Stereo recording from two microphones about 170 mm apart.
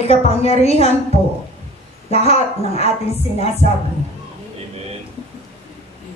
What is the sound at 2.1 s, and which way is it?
Speech, 35° left (ahead or behind).